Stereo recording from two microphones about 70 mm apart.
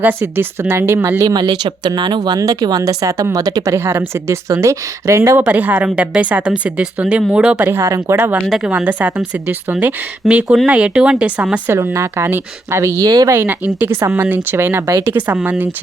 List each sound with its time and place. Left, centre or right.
0.0 s speech: right
1.3 s speech: right
3.8 s speech: right
5.5 s speech: right
7.6 s speech: right
7.9 s speech: right
8.1 s speech: right
8.4 s speech: centre
8.7 s speech: right
11.9 s speech: right
13.1 s speech: right
13.3 s speech: right
15.4 s speech: right